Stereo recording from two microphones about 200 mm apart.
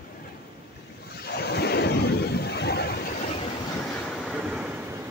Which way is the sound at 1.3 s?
55° left (ahead or behind).